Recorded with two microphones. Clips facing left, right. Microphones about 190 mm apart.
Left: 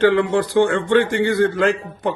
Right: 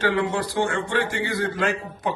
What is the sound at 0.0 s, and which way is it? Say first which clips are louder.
A man's voice: left 7 dB; 55° left (ahead or behind).